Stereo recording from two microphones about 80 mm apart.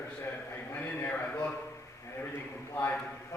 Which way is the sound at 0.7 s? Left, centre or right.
Left.